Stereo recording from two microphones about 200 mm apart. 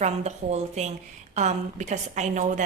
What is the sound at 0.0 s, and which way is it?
A woman's voice, 35° right (ahead or behind).